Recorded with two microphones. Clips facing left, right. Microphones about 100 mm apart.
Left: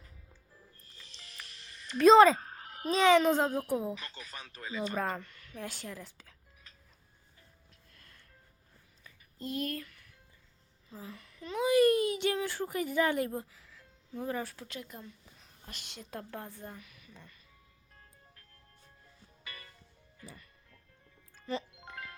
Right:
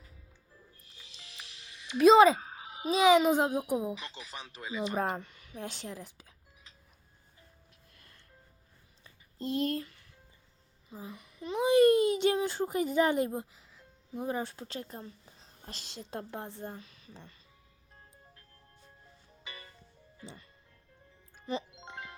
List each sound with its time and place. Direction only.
0.8 s music: 15° right (ahead or behind)
2.0 s a woman's voice: 5° right (ahead or behind)
7.9 s music: 20° right (ahead or behind)
9.0 s a sound: 30° right (ahead or behind)
10.8 s speech: 20° right (ahead or behind)
19.5 s music: 20° right (ahead or behind)